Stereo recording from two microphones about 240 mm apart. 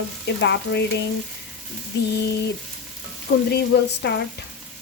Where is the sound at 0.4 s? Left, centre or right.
Left.